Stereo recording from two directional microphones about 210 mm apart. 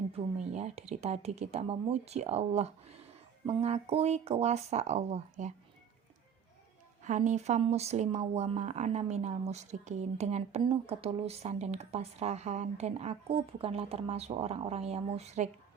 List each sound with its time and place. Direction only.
0.1 s speech: 30° right (ahead or behind)
7.0 s speech: 35° right (ahead or behind)